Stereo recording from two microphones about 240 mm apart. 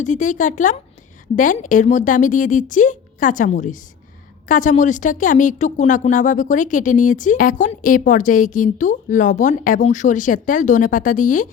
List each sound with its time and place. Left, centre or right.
0.0 s a woman's voice: left